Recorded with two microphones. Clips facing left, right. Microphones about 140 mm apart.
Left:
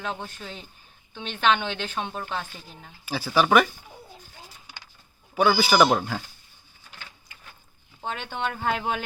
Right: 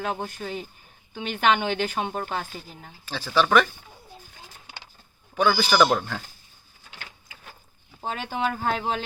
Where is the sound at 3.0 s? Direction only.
10° left (ahead or behind).